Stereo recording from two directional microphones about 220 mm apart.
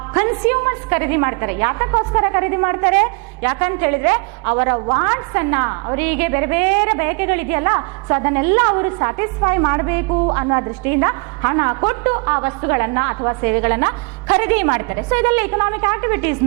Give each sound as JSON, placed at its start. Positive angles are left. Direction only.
{"t": 0.1, "sound": "a woman's voice", "side_deg": -10}